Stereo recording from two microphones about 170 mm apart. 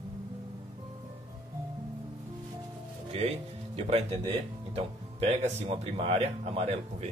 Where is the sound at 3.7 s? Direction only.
35° right (ahead or behind).